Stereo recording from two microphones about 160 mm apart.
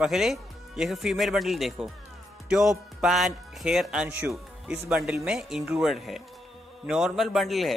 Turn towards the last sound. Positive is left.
turn(degrees=0)  # may be behind; listen again after turning